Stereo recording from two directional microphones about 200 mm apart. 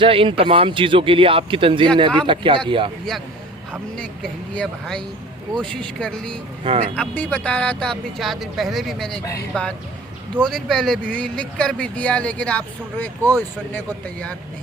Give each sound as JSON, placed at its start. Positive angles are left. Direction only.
{"t": 0.0, "sound": "speech", "side_deg": -25}
{"t": 3.7, "sound": "speech", "side_deg": 5}
{"t": 6.7, "sound": "speech", "side_deg": -30}
{"t": 6.9, "sound": "speech", "side_deg": 5}